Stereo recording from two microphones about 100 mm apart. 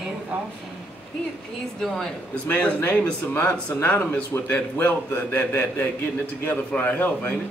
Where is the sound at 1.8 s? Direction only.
5° left (ahead or behind).